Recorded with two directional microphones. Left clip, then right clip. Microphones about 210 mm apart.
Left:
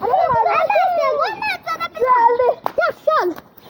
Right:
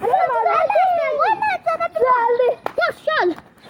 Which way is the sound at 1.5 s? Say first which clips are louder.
Right 3 dB; 55° left (ahead or behind).